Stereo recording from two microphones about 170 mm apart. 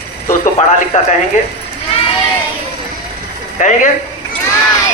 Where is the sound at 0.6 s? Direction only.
45° left (ahead or behind).